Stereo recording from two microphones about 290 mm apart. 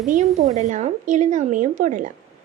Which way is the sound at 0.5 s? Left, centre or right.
Right.